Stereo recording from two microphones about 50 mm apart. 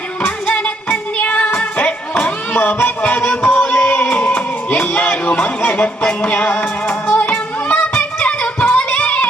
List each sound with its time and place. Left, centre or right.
0.4 s music: left